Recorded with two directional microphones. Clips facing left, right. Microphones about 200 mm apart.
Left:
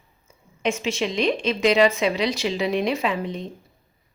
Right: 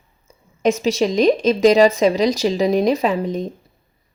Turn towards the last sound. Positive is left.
turn(degrees=-40)  # may be behind; listen again after turning